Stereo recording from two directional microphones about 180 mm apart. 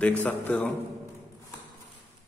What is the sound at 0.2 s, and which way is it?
Speech, 10° left (ahead or behind).